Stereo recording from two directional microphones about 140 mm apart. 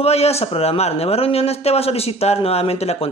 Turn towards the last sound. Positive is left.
turn(degrees=45)  # may be behind; listen again after turning